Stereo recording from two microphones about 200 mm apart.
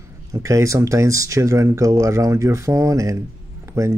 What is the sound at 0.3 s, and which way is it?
Speech, 15° right (ahead or behind).